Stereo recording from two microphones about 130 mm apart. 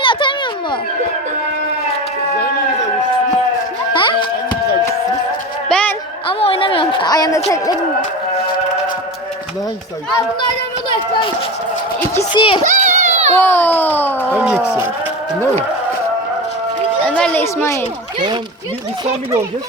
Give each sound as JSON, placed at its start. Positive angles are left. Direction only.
{"t": 0.0, "sound": "children playing", "side_deg": 40}
{"t": 3.9, "sound": "music", "side_deg": 40}
{"t": 5.6, "sound": "a sound", "side_deg": 10}
{"t": 6.2, "sound": "a sound", "side_deg": 45}
{"t": 7.5, "sound": "speech", "side_deg": 25}
{"t": 12.3, "sound": "a child's voice", "side_deg": 40}
{"t": 12.6, "sound": "children playing", "side_deg": -70}
{"t": 13.3, "sound": "a child's voice", "side_deg": 15}
{"t": 14.3, "sound": "speech", "side_deg": -10}
{"t": 17.1, "sound": "a sound", "side_deg": 10}
{"t": 17.4, "sound": "speech", "side_deg": 20}